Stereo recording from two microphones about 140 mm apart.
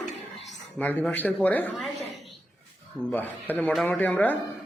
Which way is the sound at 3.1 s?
10° left (ahead or behind).